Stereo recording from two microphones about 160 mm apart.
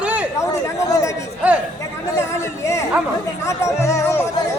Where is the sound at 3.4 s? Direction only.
20° left (ahead or behind).